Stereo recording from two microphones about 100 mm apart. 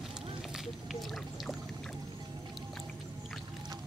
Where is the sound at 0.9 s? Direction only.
Centre (ahead or behind).